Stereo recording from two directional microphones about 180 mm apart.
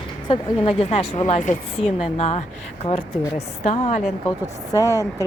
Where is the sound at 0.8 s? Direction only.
35° left (ahead or behind).